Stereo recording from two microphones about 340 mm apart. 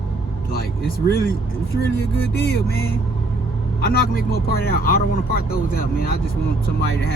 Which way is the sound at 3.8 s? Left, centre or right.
Left.